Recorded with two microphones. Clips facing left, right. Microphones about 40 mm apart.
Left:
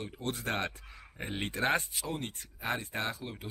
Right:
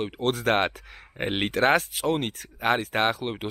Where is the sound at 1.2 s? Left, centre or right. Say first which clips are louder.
Right 10 dB; right.